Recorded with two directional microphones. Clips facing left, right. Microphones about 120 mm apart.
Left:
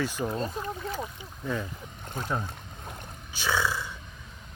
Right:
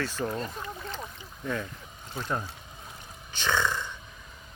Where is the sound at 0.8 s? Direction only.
5° left (ahead or behind).